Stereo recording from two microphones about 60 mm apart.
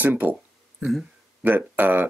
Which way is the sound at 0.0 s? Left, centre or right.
Right.